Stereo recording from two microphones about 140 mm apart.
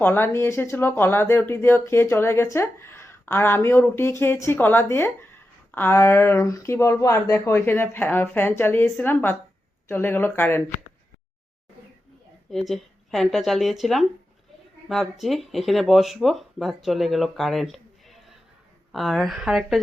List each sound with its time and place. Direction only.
0.0 s speech: 15° left (ahead or behind)
12.5 s speech: centre (ahead or behind)